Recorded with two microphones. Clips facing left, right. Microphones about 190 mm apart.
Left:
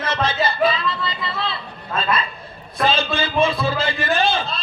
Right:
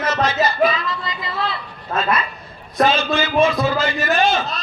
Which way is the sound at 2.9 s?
30° left (ahead or behind).